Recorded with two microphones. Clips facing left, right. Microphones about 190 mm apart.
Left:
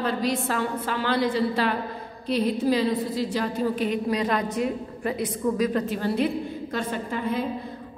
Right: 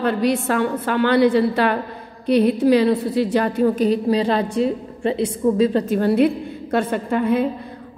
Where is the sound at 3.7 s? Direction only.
35° right (ahead or behind).